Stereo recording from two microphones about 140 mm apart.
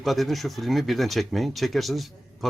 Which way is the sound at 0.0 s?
Centre (ahead or behind).